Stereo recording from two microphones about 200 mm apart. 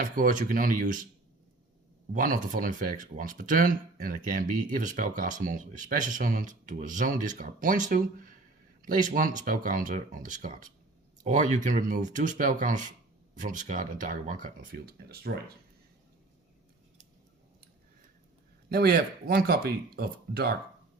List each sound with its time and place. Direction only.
0.0 s speech: 40° right (ahead or behind)
2.1 s speech: 40° right (ahead or behind)
18.7 s speech: 50° right (ahead or behind)